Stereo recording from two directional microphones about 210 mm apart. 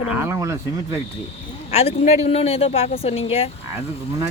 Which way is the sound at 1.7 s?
30° left (ahead or behind).